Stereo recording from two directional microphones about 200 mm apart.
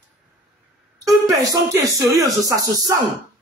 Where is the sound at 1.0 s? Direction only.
15° right (ahead or behind).